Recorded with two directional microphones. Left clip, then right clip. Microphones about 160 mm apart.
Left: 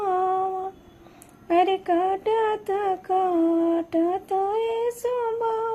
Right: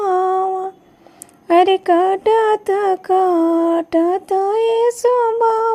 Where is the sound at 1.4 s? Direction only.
40° right (ahead or behind).